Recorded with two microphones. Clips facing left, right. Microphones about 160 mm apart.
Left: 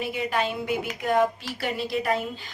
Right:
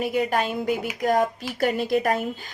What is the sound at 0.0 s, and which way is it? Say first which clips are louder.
A woman's voice: right 4 dB; 45° right (ahead or behind).